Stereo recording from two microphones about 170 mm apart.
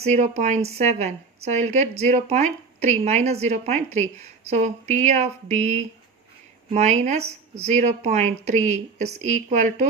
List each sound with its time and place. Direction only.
0.0 s a woman's voice: 45° right (ahead or behind)